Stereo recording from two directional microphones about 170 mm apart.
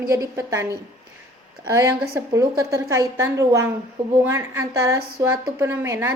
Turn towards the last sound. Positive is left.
turn(degrees=-15)  # may be behind; listen again after turning